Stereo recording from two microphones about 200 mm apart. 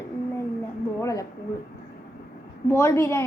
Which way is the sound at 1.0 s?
15° left (ahead or behind).